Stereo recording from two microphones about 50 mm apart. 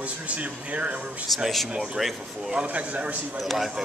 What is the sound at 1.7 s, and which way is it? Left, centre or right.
Speech, centre.